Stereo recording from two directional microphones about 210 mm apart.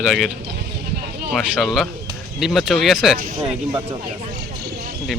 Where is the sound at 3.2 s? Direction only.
40° right (ahead or behind).